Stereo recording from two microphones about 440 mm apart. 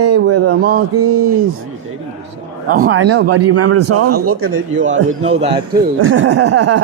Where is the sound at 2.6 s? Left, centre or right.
Centre.